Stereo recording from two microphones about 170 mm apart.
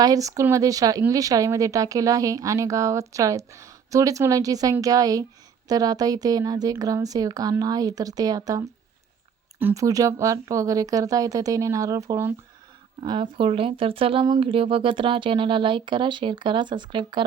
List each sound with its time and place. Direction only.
0.0 s speech: 20° right (ahead or behind)
13.0 s speech: 30° right (ahead or behind)